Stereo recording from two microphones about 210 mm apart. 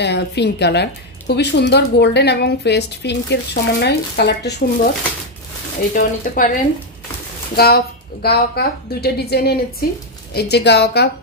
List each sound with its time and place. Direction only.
0.0 s a woman's voice: 55° left (ahead or behind)
5.9 s speech: 40° left (ahead or behind)
7.5 s a woman's voice: 50° left (ahead or behind)